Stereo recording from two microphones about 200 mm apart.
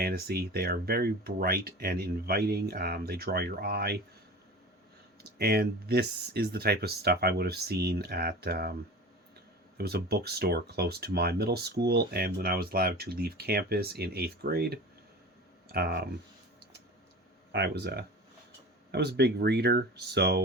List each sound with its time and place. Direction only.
0.0 s speech: 50° right (ahead or behind)
5.4 s speech: 50° right (ahead or behind)
9.7 s speech: 50° right (ahead or behind)
17.5 s speech: 55° right (ahead or behind)